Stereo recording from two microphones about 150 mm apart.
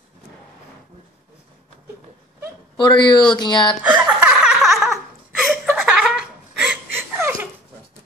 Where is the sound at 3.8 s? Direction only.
10° right (ahead or behind).